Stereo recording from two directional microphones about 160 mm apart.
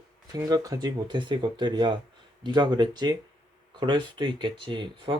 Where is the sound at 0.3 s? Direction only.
20° right (ahead or behind).